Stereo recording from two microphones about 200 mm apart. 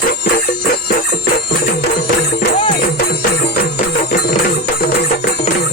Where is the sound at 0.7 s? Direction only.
50° left (ahead or behind).